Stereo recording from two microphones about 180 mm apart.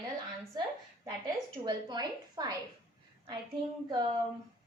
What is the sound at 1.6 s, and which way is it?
Speech, 20° right (ahead or behind).